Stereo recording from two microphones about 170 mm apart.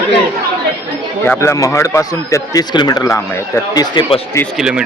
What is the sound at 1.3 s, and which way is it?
Speech, 15° left (ahead or behind).